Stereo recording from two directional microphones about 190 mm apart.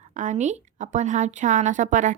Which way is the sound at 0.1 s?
40° right (ahead or behind).